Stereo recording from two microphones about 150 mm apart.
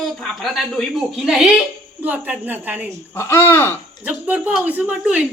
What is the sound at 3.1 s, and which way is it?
Speech, 20° left (ahead or behind).